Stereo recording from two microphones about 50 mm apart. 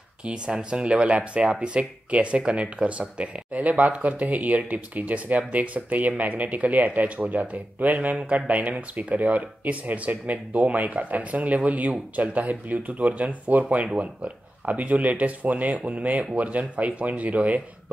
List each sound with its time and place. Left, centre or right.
0.2 s speech: centre